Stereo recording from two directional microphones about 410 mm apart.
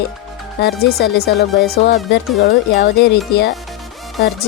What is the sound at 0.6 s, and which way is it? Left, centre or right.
Speech, left.